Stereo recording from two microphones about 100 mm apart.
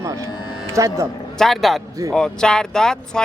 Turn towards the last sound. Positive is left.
turn(degrees=5)  # may be behind; listen again after turning